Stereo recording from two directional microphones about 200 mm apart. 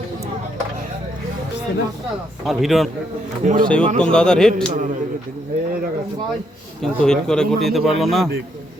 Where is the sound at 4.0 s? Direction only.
5° left (ahead or behind).